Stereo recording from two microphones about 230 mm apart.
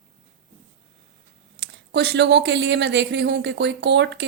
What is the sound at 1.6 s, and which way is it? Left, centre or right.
Speech, right.